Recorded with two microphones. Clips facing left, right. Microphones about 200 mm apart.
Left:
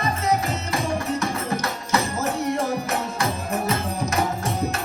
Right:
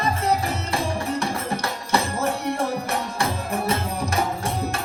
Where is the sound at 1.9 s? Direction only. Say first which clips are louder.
Right 1 dB; 30° right (ahead or behind).